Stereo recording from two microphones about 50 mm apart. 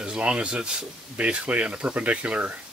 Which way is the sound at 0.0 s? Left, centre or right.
Centre.